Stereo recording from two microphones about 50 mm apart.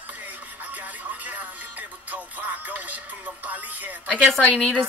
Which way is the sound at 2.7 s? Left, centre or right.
Right.